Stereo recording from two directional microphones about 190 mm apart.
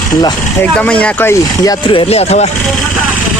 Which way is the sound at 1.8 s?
25° left (ahead or behind).